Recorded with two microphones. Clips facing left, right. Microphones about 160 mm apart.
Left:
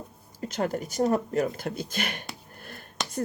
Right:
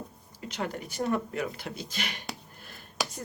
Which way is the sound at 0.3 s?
45° left (ahead or behind).